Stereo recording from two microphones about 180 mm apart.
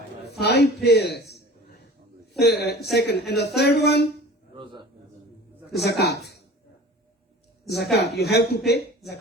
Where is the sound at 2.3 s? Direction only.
65° left (ahead or behind).